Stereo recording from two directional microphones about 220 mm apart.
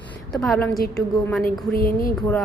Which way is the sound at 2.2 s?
Centre (ahead or behind).